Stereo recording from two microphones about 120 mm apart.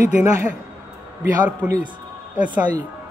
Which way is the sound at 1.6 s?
10° right (ahead or behind).